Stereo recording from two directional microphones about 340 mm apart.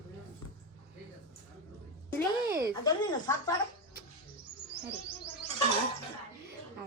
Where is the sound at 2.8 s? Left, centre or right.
Centre.